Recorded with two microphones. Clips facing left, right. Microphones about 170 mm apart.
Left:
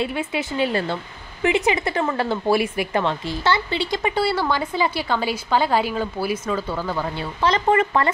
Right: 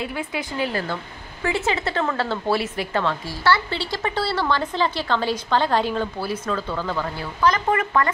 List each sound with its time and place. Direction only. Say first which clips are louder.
0.0 s a woman's voice: left 4 dB; 25° left (ahead or behind)
7.3 s speech: left 2 dB; 30° left (ahead or behind)